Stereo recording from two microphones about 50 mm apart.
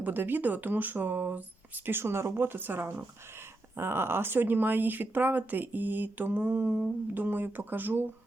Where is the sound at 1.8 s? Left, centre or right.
Right.